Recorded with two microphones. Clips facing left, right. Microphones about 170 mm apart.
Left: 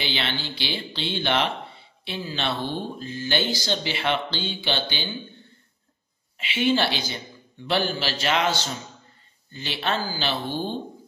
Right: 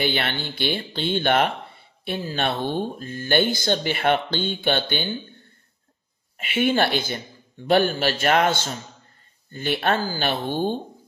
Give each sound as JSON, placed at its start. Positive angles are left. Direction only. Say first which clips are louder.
{"t": 0.0, "sound": "speech", "louder": "right 4 dB", "side_deg": -50}
{"t": 6.3, "sound": "speech", "louder": "right 1 dB", "side_deg": -50}